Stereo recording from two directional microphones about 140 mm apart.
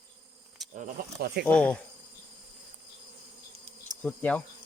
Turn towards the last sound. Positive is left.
turn(degrees=10)  # may be behind; listen again after turning